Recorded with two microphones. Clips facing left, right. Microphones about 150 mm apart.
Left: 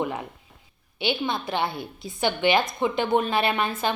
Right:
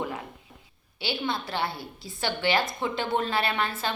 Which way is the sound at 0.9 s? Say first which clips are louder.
Left 4 dB; 20° left (ahead or behind).